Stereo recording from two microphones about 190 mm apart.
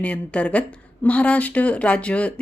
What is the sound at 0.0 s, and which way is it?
Speech, 5° left (ahead or behind).